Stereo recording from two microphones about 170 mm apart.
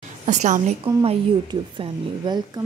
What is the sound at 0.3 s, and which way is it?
Speech, 45° right (ahead or behind).